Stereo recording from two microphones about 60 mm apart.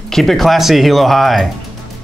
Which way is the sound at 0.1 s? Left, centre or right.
Centre.